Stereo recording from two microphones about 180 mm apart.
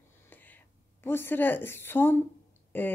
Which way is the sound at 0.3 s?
10° left (ahead or behind).